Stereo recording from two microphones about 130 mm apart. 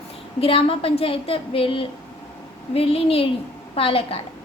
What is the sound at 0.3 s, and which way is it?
A woman's voice, 45° left (ahead or behind).